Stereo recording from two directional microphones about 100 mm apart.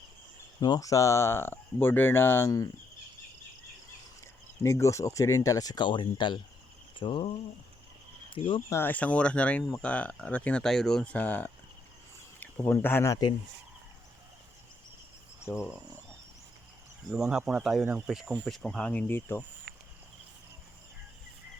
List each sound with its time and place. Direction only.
0.6 s speech: 40° left (ahead or behind); by 2.5 s 25° left (ahead or behind)
4.6 s speech: 30° left (ahead or behind); by 7.3 s 60° left (ahead or behind)
8.3 s speech: 60° left (ahead or behind)
8.7 s speech: 20° left (ahead or behind)
15.4 s speech: 25° left (ahead or behind)
17.1 s speech: 5° right (ahead or behind); by 19.5 s 20° left (ahead or behind)